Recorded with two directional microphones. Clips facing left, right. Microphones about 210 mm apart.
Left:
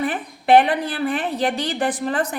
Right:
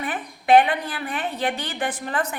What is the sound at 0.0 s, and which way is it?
A woman's voice, 35° left (ahead or behind).